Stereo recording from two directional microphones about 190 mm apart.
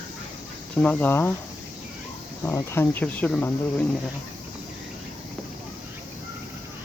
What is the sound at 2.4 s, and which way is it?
Speech, 10° left (ahead or behind).